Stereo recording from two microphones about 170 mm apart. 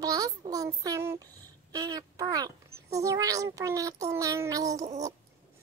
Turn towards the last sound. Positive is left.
turn(degrees=-20)  # may be behind; listen again after turning